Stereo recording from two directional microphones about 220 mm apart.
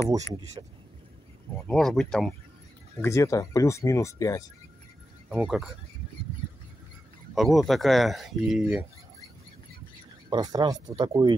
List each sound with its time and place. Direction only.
0.6 s speech: 20° right (ahead or behind)
1.7 s speech: 5° left (ahead or behind)
3.0 s speech: 15° left (ahead or behind)
5.3 s speech: 5° right (ahead or behind)
7.3 s speech: centre (ahead or behind)
10.3 s speech: 20° right (ahead or behind)